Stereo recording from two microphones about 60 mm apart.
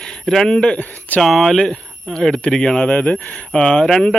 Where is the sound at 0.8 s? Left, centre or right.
Left.